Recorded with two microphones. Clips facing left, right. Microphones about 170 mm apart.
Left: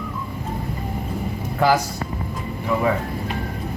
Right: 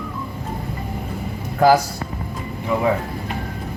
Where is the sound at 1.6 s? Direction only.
40° right (ahead or behind).